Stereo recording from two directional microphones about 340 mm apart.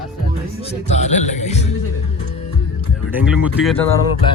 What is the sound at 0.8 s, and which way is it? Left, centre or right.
Speech, centre.